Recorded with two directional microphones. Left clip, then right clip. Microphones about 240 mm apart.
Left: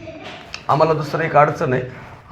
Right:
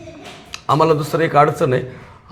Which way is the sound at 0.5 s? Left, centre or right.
Right.